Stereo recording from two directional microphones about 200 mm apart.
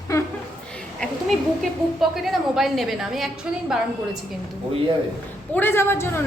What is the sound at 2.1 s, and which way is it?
A woman's voice, centre (ahead or behind).